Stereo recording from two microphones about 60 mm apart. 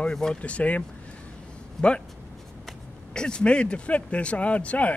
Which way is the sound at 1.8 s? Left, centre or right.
Centre.